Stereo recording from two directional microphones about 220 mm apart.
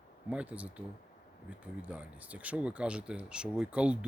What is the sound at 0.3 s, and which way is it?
Speech, 5° right (ahead or behind).